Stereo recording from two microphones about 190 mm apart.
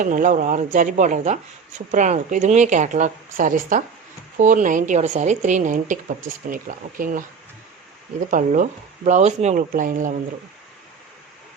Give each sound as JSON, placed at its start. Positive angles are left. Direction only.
{"t": 0.0, "sound": "a woman's voice", "side_deg": -45}
{"t": 8.3, "sound": "a woman's voice", "side_deg": -40}